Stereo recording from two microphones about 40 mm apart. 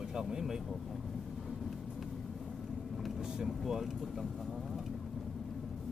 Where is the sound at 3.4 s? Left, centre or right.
Centre.